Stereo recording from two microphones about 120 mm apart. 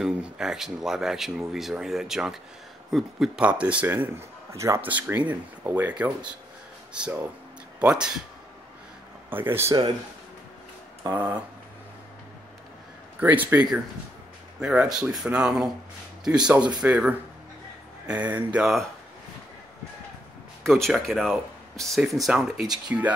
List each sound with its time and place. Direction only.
0.0 s a man's voice: 5° right (ahead or behind)
9.3 s speech: 20° right (ahead or behind)
11.1 s a man's voice: 15° right (ahead or behind)
13.2 s a man's voice: 15° right (ahead or behind)
20.6 s speech: 5° left (ahead or behind)